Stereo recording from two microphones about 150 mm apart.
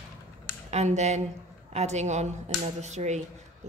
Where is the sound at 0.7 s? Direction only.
50° right (ahead or behind).